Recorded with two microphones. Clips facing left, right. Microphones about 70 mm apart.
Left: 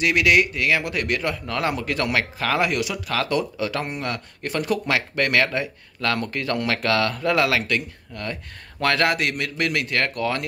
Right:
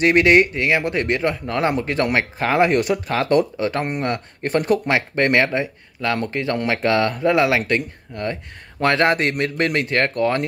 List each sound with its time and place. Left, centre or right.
0.0 s speech: right